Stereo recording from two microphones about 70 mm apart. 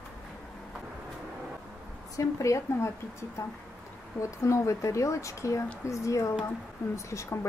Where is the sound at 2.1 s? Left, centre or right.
Left.